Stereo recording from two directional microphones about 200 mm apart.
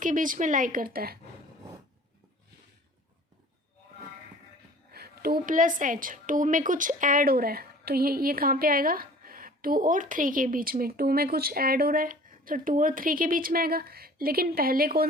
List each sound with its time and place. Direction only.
0.0 s a woman's voice: 40° right (ahead or behind)
4.9 s a woman's voice: 50° right (ahead or behind)